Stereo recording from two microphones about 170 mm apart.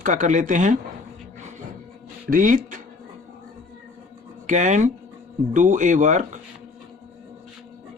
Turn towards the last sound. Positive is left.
turn(degrees=-45)  # may be behind; listen again after turning